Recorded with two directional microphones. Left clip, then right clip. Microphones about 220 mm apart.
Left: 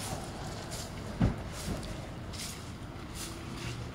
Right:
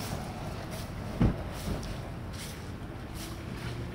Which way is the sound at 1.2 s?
45° right (ahead or behind).